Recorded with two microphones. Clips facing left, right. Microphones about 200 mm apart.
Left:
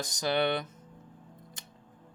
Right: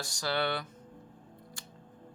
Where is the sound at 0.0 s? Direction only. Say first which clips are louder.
Left 4 dB; 20° left (ahead or behind).